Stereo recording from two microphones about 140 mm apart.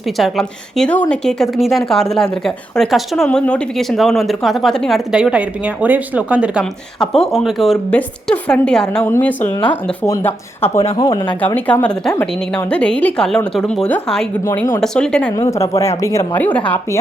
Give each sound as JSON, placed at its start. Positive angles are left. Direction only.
{"t": 0.2, "sound": "speech", "side_deg": 0}
{"t": 7.0, "sound": "speech", "side_deg": 5}
{"t": 11.3, "sound": "speech", "side_deg": 10}
{"t": 14.4, "sound": "speech", "side_deg": 20}
{"t": 14.8, "sound": "speech", "side_deg": 5}
{"t": 15.3, "sound": "speech", "side_deg": 25}